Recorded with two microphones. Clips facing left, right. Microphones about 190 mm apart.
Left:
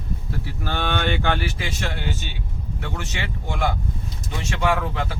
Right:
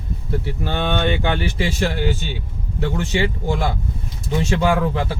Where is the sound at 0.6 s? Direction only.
20° right (ahead or behind).